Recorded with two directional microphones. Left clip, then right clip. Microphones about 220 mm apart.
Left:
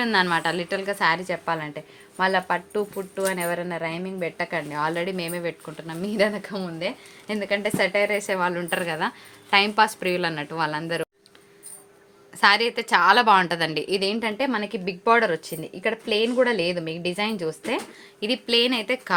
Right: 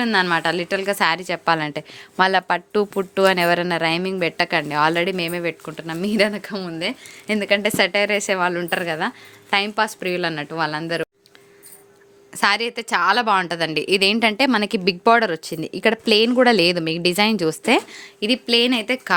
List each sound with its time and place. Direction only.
0.0 s a woman's voice: 25° right (ahead or behind)
12.4 s a woman's voice: 30° right (ahead or behind); by 18.0 s 50° right (ahead or behind)
18.2 s speech: 30° right (ahead or behind)